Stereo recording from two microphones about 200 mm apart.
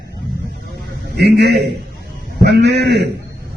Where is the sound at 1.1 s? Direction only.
55° right (ahead or behind).